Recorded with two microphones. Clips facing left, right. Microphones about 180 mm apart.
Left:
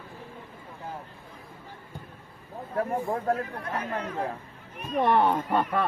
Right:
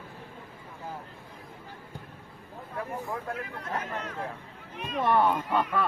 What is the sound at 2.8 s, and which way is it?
Speech, 40° left (ahead or behind).